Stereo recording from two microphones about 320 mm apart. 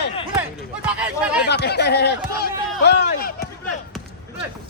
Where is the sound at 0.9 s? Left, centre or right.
Centre.